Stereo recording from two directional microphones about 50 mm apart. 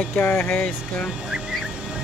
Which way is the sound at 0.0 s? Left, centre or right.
Left.